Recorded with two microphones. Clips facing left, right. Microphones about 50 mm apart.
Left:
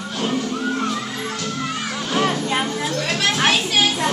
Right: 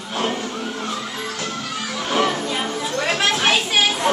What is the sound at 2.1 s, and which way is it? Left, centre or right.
Music, right.